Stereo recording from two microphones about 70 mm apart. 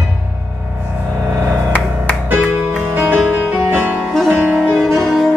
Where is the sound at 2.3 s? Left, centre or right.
Right.